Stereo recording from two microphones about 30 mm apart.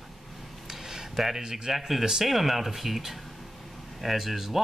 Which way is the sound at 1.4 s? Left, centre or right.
Right.